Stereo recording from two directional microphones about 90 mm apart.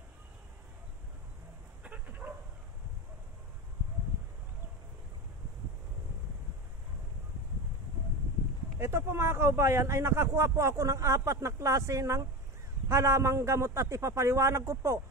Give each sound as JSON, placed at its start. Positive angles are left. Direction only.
{"t": 1.8, "sound": "dog", "side_deg": -15}
{"t": 8.7, "sound": "speech", "side_deg": -30}